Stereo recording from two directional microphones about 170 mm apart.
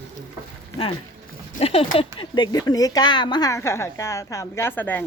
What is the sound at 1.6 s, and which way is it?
A woman's voice, 35° left (ahead or behind).